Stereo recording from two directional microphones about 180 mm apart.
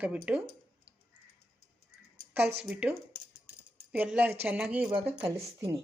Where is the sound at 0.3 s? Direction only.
5° right (ahead or behind).